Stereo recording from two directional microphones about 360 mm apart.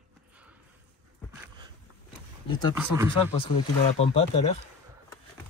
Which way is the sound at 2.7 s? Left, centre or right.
Centre.